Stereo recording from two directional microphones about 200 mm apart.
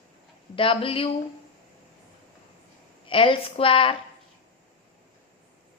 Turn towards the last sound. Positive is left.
turn(degrees=25)  # may be behind; listen again after turning